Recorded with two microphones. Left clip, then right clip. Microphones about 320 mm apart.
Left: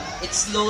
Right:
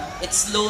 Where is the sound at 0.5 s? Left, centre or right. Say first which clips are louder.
Even; right.